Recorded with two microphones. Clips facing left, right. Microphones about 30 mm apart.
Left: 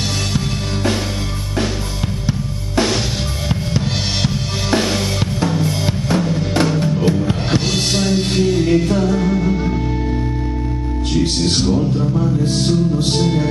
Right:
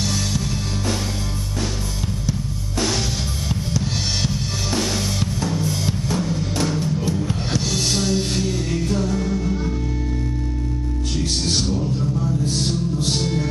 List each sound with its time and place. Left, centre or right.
3.7 s drum: left
7.2 s music: left
11.1 s music: left